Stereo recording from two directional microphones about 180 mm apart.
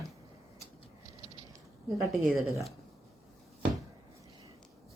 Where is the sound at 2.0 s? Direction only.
Centre (ahead or behind).